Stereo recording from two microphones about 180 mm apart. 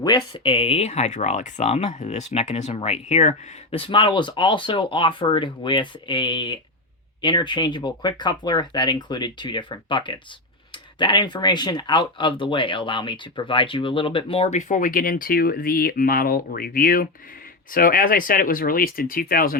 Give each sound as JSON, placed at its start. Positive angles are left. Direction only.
{"t": 0.3, "sound": "speech", "side_deg": 30}